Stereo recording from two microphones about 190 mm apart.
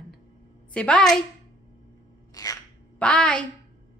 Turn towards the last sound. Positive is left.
turn(degrees=5)  # may be behind; listen again after turning